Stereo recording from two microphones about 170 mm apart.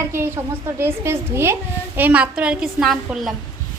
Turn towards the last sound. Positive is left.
turn(degrees=0)  # may be behind; listen again after turning